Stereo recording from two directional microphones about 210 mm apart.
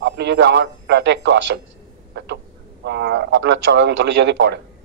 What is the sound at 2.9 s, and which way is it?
Speech, 55° right (ahead or behind).